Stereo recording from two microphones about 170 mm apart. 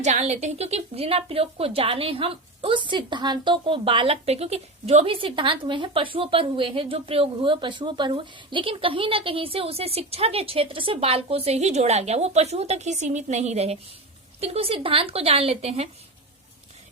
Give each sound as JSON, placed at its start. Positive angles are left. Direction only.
{"t": 0.0, "sound": "a woman's voice", "side_deg": -40}